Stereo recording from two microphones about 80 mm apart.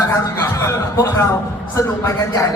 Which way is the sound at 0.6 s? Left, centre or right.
Left.